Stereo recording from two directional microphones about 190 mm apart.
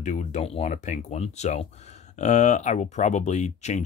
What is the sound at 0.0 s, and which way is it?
Speech, 40° left (ahead or behind).